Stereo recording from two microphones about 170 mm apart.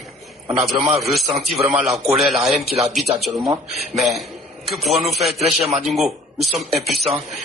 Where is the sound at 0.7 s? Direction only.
Centre (ahead or behind).